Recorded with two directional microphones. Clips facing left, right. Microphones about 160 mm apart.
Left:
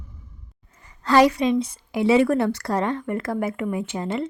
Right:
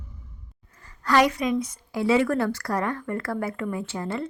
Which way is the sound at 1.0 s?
30° left (ahead or behind).